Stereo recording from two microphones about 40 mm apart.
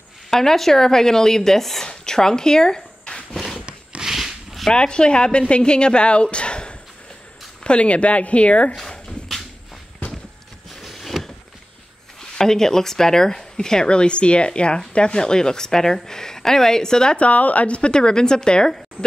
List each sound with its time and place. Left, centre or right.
0.3 s speech: centre
3.5 s a sound: right
4.0 s a sound: centre
4.6 s a woman's voice: left
10.7 s vehicle: centre
12.2 s speech: centre
17.2 s a woman's voice: left; by 19.0 s centre